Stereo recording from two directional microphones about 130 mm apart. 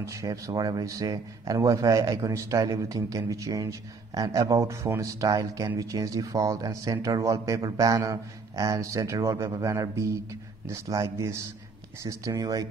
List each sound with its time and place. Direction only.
0.0 s speech: 25° right (ahead or behind)